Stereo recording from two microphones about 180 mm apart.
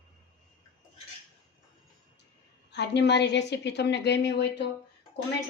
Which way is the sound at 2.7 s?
70° left (ahead or behind).